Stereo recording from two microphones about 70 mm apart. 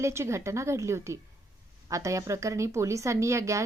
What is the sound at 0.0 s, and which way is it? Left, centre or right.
Speech, right.